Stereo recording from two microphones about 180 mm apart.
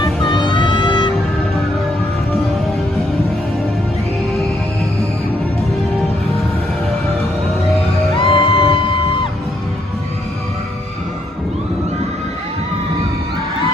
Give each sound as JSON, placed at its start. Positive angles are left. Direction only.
{"t": 0.0, "sound": "music", "side_deg": 25}
{"t": 8.1, "sound": "music", "side_deg": 30}